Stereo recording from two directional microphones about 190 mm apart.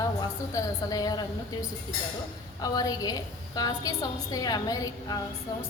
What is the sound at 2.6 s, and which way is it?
A woman's voice, 20° left (ahead or behind).